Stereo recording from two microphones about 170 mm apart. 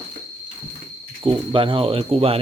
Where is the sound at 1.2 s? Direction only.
30° right (ahead or behind).